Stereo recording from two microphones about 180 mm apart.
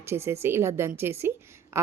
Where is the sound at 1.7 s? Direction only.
15° right (ahead or behind).